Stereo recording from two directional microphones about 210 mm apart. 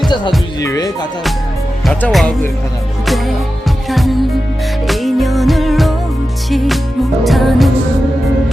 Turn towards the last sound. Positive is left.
turn(degrees=0)  # may be behind; listen again after turning